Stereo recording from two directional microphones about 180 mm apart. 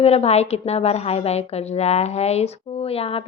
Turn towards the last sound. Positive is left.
turn(degrees=35)  # may be behind; listen again after turning